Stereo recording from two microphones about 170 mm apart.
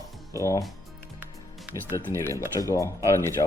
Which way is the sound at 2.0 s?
15° left (ahead or behind).